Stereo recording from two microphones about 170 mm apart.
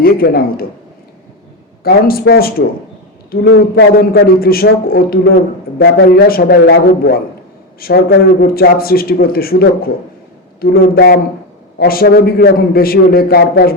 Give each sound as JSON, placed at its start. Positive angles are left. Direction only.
{"t": 0.0, "sound": "a man's voice", "side_deg": 60}
{"t": 1.8, "sound": "a man's voice", "side_deg": 60}